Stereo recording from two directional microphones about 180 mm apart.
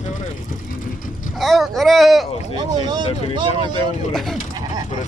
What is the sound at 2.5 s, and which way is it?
Speech, 25° right (ahead or behind).